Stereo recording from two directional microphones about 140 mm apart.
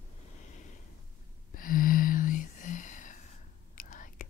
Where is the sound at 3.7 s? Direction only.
70° left (ahead or behind).